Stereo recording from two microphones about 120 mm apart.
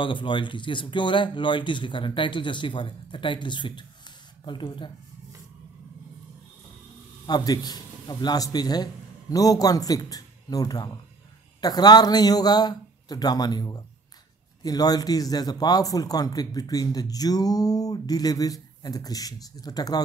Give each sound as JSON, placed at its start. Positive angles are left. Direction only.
{"t": 0.0, "sound": "speech", "side_deg": 45}
{"t": 7.2, "sound": "speech", "side_deg": 35}